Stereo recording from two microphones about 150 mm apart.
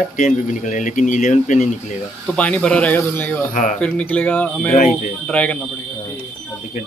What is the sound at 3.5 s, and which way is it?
Speech, 60° left (ahead or behind).